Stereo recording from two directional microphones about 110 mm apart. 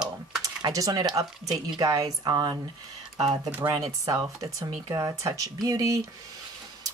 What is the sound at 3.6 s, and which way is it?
Speech, 35° right (ahead or behind).